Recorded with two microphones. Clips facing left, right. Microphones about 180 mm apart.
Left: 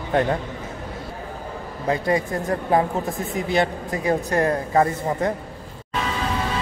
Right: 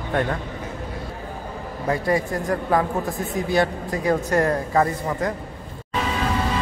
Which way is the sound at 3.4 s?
20° left (ahead or behind).